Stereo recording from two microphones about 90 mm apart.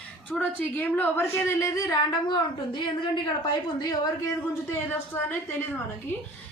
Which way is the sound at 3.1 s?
55° left (ahead or behind).